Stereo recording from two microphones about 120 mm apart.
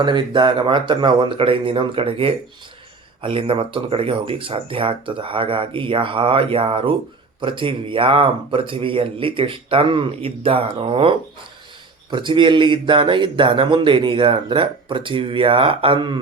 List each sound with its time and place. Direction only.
0.0 s a man's voice: 40° right (ahead or behind)
12.1 s a man's voice: 40° right (ahead or behind)